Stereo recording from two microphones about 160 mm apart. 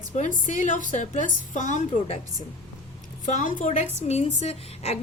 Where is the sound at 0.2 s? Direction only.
50° left (ahead or behind).